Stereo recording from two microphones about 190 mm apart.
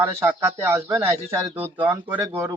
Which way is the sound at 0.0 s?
15° right (ahead or behind).